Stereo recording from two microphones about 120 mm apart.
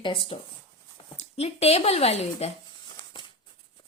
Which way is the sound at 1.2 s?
60° left (ahead or behind).